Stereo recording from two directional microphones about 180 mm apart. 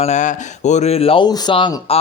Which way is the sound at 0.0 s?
40° left (ahead or behind).